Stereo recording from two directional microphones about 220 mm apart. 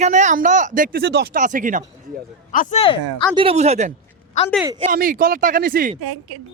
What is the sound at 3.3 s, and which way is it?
Speech, 25° right (ahead or behind).